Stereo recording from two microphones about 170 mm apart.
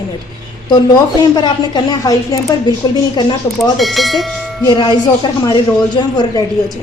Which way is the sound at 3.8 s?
Centre (ahead or behind).